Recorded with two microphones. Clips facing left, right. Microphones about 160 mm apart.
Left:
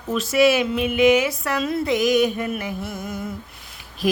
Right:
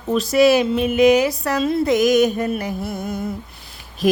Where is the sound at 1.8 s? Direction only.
45° right (ahead or behind).